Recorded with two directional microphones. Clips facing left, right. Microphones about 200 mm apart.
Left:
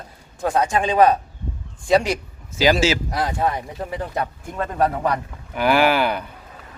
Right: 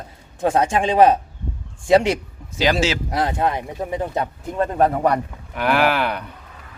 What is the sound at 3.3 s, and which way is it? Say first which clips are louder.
A man's voice: right 1 dB; 15° right (ahead or behind).